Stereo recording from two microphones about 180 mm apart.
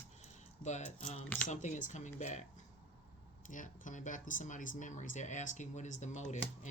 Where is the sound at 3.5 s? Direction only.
45° left (ahead or behind).